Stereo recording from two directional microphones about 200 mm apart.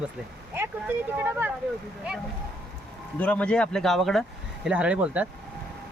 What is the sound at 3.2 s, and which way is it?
A man's voice, 5° left (ahead or behind).